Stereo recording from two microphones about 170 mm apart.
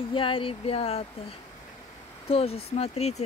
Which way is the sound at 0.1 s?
30° left (ahead or behind).